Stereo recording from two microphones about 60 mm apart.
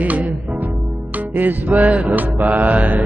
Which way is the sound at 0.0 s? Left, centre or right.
Right.